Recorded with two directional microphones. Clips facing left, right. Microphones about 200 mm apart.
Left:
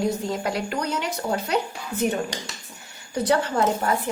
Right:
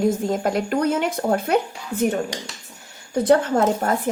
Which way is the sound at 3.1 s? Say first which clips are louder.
Right 5 dB; 50° right (ahead or behind).